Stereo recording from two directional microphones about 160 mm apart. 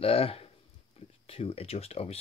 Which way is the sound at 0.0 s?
35° left (ahead or behind).